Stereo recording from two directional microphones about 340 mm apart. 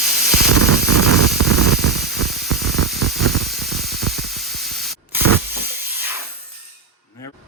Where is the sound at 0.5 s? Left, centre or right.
Right.